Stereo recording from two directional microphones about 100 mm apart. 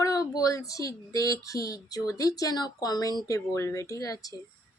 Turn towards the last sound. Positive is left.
turn(degrees=35)  # may be behind; listen again after turning